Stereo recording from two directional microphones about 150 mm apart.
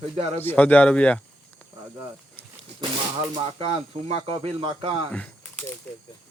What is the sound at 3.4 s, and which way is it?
Speech, 40° right (ahead or behind).